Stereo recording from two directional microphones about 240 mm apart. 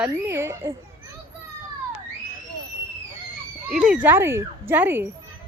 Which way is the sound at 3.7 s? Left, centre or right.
Centre.